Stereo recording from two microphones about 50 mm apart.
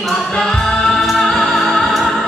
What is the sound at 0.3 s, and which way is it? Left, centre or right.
Music, centre.